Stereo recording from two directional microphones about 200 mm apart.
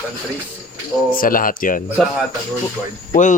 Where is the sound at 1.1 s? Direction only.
45° left (ahead or behind).